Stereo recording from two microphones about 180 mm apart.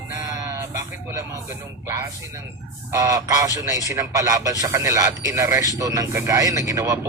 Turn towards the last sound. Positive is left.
turn(degrees=-15)  # may be behind; listen again after turning